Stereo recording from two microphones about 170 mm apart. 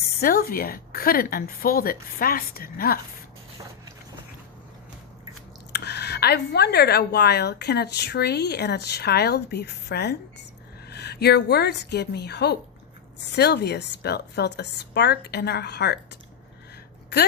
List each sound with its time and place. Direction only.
0.2 s a woman's voice: 60° left (ahead or behind)
5.7 s a woman's voice: 75° left (ahead or behind)